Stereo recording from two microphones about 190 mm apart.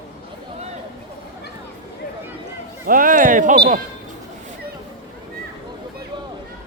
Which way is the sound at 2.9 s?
45° right (ahead or behind).